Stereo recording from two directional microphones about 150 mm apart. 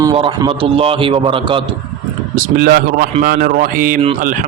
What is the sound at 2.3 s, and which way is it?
Speech, 70° right (ahead or behind).